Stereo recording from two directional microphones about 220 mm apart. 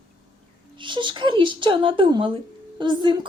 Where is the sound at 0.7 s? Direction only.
20° right (ahead or behind).